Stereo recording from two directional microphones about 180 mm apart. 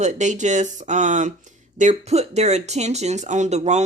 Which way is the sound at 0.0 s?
40° right (ahead or behind).